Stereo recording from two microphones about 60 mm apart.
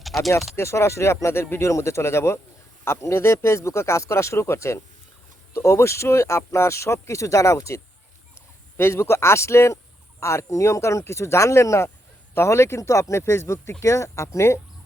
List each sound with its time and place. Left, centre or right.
0.0 s a sound: centre
0.5 s speech: left
8.8 s speech: left